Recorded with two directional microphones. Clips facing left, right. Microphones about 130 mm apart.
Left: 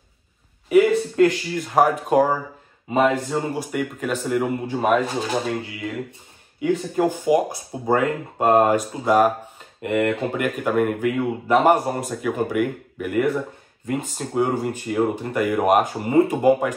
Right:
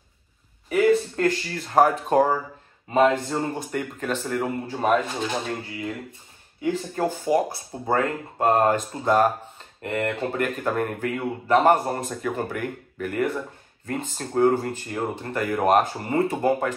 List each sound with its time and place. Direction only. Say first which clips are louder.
0.7 s speech: left 3 dB; 10° left (ahead or behind)
7.0 s speech: left 4 dB; 15° left (ahead or behind)